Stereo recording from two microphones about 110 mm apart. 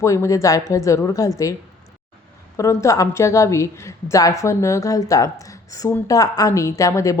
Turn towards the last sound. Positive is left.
turn(degrees=30)  # may be behind; listen again after turning